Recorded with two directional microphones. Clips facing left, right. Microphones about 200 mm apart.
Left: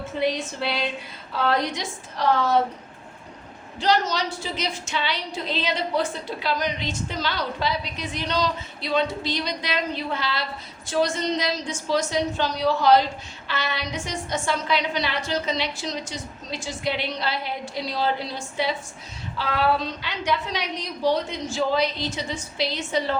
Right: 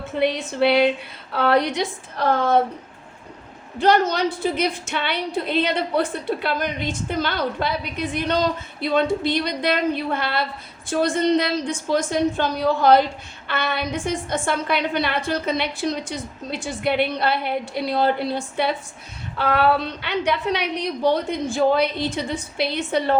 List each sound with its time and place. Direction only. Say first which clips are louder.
0.2 s a woman's voice: right 6 dB; 60° right (ahead or behind)
3.8 s a woman's voice: right 5 dB; 55° right (ahead or behind)